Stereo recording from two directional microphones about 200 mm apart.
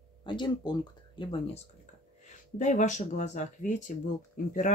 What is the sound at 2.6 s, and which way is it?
Speech, 35° left (ahead or behind).